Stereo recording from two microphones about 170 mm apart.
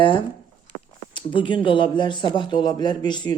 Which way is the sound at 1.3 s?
30° left (ahead or behind).